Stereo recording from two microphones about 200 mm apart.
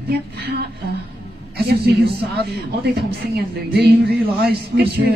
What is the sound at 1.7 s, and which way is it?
A woman's voice, 50° right (ahead or behind).